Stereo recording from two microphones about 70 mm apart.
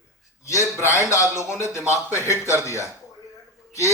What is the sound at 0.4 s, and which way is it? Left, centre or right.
A man's voice, left.